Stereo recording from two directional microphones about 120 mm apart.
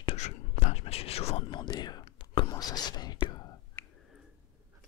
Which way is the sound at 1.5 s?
40° left (ahead or behind).